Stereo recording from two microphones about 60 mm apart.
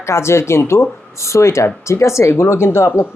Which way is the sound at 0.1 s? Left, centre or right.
Left.